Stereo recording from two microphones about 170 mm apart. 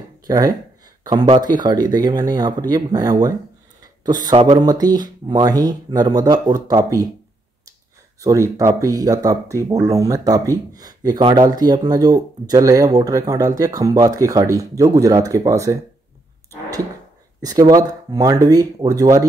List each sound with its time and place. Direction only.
0.3 s speech: 20° right (ahead or behind)
3.8 s a sound: 25° right (ahead or behind)
4.4 s speech: 25° right (ahead or behind)
8.2 s speech: 20° right (ahead or behind)
17.4 s speech: 20° right (ahead or behind)